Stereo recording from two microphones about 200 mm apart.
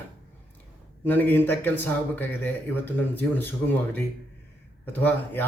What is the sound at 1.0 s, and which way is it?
Speech, 10° left (ahead or behind).